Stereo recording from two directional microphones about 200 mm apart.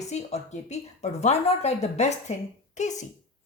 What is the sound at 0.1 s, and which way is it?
Speech, 35° left (ahead or behind).